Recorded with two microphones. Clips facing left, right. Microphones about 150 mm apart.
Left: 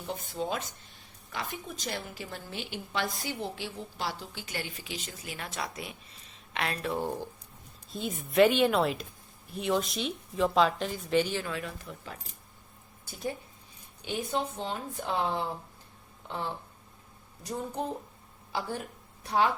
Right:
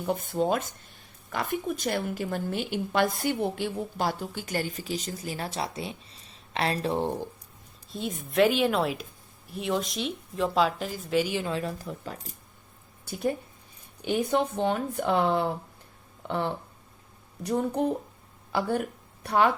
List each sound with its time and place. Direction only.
0.0 s a woman's voice: 55° right (ahead or behind); by 7.1 s 30° right (ahead or behind)
7.9 s speech: centre (ahead or behind)
11.4 s speech: 30° right (ahead or behind)
14.0 s speech: 60° right (ahead or behind)